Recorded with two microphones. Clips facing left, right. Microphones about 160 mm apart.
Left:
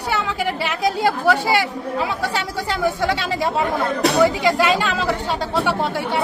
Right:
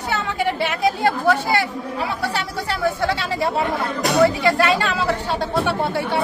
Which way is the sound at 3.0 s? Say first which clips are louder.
Left 1 dB; 15° left (ahead or behind).